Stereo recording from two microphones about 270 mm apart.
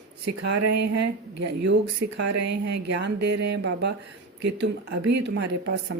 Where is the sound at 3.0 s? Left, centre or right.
Right.